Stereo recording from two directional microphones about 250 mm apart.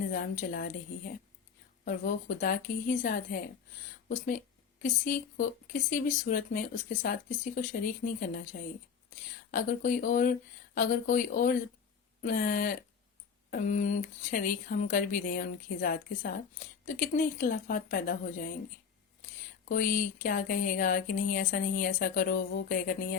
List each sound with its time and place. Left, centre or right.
0.1 s speech: left
1.8 s speech: left
4.8 s speech: left
9.5 s speech: left
19.6 s speech: left